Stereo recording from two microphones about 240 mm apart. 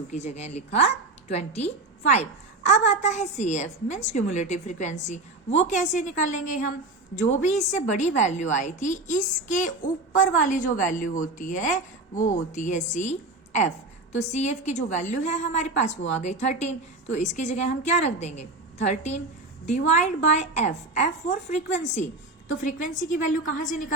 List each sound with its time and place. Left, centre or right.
0.1 s a woman's voice: left